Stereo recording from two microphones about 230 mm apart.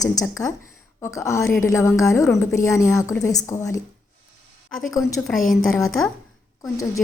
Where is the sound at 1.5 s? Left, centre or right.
Left.